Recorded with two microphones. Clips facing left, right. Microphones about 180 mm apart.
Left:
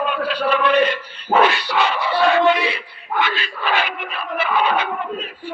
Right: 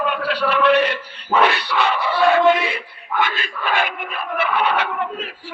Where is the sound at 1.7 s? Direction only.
50° left (ahead or behind).